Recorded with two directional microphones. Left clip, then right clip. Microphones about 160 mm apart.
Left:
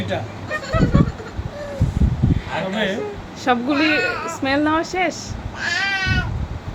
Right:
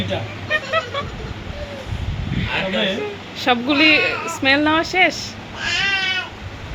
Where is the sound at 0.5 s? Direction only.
Centre (ahead or behind).